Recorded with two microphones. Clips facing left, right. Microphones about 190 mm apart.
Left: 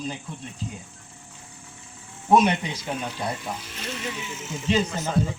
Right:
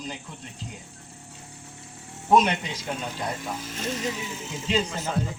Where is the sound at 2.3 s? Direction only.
10° left (ahead or behind).